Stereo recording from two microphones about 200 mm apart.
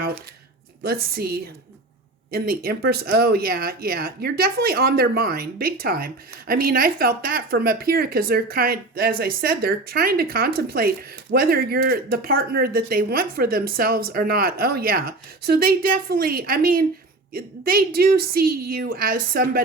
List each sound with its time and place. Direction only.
0.8 s speech: 50° right (ahead or behind)